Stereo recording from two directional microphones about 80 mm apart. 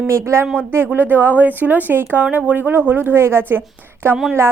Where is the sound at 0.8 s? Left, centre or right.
Right.